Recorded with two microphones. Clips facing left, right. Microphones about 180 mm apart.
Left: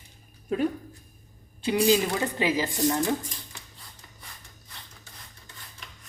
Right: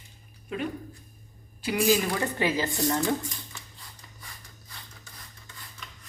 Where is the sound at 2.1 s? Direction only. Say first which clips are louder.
Left 1 dB; 15° left (ahead or behind).